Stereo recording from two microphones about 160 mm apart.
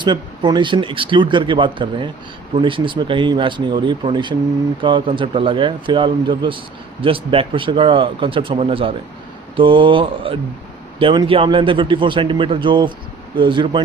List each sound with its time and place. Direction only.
0.0 s speech: 30° right (ahead or behind)